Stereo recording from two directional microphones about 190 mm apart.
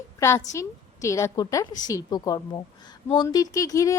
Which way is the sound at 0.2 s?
15° left (ahead or behind).